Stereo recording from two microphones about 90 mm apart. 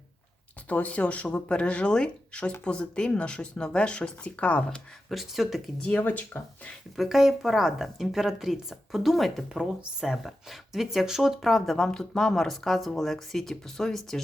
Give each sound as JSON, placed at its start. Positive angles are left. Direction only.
{"t": 0.7, "sound": "speech", "side_deg": 15}
{"t": 5.0, "sound": "a woman's voice", "side_deg": 0}
{"t": 5.8, "sound": "speech", "side_deg": 15}
{"t": 6.9, "sound": "a woman's voice", "side_deg": -5}